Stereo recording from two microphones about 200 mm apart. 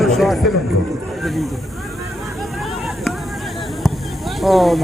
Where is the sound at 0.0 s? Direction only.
Centre (ahead or behind).